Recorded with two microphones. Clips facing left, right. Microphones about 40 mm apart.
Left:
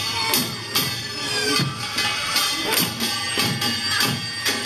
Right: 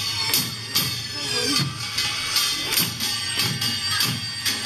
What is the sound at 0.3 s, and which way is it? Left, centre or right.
Music, centre.